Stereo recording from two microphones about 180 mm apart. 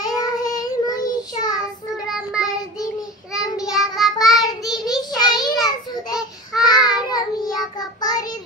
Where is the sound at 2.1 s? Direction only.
5° right (ahead or behind).